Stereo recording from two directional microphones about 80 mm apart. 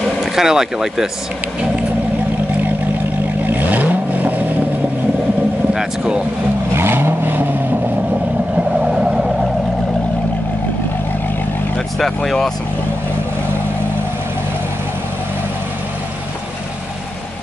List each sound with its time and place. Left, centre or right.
0.2 s speech: centre
3.4 s vehicle: right
5.7 s vehicle: centre
6.7 s vehicle: right
8.5 s vehicle: centre
12.0 s speech: centre